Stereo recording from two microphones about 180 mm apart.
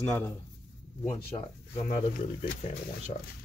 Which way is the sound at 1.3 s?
30° left (ahead or behind).